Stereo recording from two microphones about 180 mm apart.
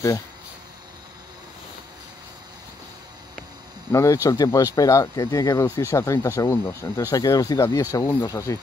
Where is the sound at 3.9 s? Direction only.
15° left (ahead or behind).